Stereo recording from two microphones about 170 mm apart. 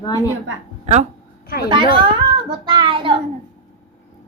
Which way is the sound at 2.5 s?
25° right (ahead or behind).